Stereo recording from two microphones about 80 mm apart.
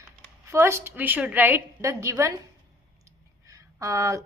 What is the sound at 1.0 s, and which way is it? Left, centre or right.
Speech, centre.